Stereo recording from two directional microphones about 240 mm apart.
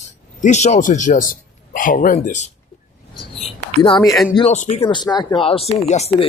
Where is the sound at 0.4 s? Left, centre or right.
Left.